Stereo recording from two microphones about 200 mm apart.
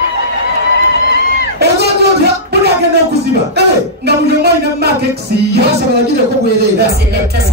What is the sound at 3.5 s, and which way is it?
Speech, 55° right (ahead or behind).